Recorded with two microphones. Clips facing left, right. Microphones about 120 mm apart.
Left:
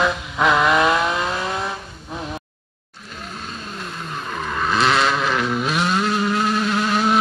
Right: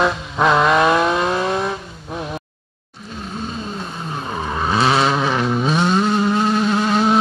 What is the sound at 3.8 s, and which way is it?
Vehicle, 25° right (ahead or behind).